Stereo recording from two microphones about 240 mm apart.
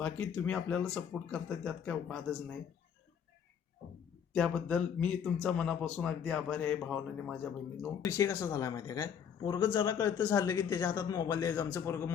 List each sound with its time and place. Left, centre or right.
0.0 s speech: centre
4.4 s speech: centre